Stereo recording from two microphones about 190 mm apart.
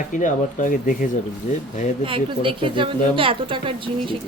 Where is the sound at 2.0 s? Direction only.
25° right (ahead or behind).